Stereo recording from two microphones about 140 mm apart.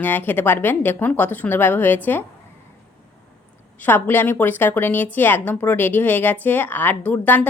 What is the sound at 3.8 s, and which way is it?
A woman's voice, 15° left (ahead or behind).